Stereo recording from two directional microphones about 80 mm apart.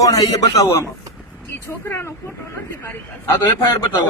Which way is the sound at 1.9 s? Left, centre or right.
Left.